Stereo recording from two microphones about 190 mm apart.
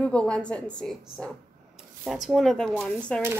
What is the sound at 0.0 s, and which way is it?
A woman's voice, 5° left (ahead or behind).